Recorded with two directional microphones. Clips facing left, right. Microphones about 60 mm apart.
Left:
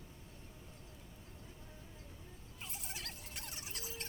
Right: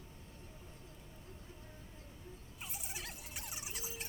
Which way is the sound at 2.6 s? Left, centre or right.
Centre.